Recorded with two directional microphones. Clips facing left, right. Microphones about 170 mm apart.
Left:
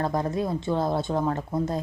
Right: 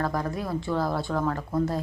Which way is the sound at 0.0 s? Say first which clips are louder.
Left 3 dB; 25° left (ahead or behind).